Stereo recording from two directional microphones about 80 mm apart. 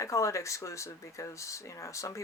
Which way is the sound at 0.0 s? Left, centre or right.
Left.